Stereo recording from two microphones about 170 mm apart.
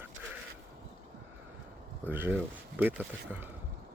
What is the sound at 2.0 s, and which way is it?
Speech, 10° right (ahead or behind).